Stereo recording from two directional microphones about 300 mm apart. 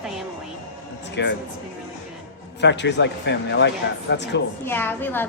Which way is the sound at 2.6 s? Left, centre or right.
Left.